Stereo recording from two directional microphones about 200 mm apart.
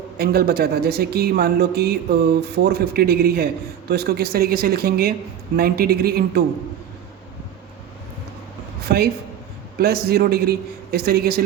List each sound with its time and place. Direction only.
0.2 s speech: 50° right (ahead or behind)
8.9 s speech: 50° right (ahead or behind)